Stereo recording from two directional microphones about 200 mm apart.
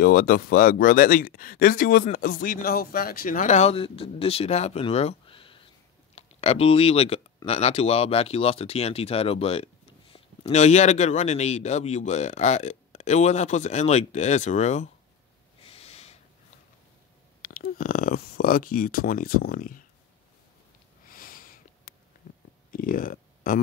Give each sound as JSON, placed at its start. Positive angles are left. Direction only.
{"t": 0.0, "sound": "speech", "side_deg": 45}
{"t": 15.6, "sound": "snort", "side_deg": 30}
{"t": 17.4, "sound": "speech", "side_deg": 45}
{"t": 21.1, "sound": "sniff", "side_deg": 45}
{"t": 22.7, "sound": "a sound", "side_deg": 45}